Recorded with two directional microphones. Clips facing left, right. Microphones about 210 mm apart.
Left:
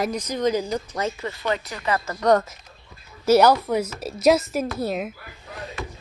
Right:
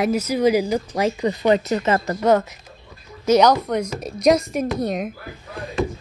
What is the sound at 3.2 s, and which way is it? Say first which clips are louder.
Speech: right 1 dB; 5° left (ahead or behind).